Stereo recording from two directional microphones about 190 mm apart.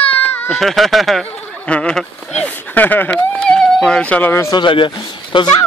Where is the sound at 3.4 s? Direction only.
5° left (ahead or behind); by 5.5 s 25° left (ahead or behind).